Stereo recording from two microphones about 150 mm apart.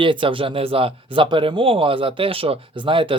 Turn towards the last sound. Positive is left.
turn(degrees=-35)  # may be behind; listen again after turning